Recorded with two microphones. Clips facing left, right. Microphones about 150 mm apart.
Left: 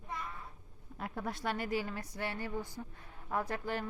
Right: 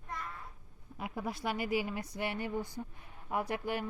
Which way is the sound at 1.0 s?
5° right (ahead or behind).